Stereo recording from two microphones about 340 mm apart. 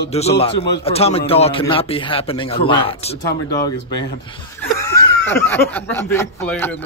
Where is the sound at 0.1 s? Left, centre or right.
Centre.